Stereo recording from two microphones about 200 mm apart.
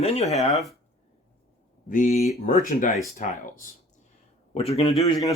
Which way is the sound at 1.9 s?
40° left (ahead or behind).